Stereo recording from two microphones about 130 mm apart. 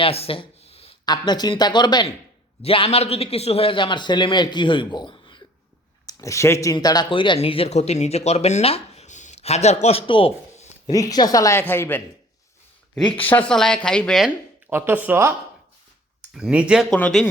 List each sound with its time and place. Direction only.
0.0 s a sound: 50° left (ahead or behind)
1.0 s a man's voice: 35° left (ahead or behind)
2.6 s a man's voice: 45° left (ahead or behind)
6.1 s speech: 25° left (ahead or behind); by 10.0 s 55° left (ahead or behind)
10.1 s a sound: 45° left (ahead or behind)
10.9 s speech: 30° left (ahead or behind)
13.2 s speech: 15° left (ahead or behind)
14.3 s speech: 20° right (ahead or behind)
16.3 s speech: 5° right (ahead or behind)
16.9 s speech: 5° left (ahead or behind)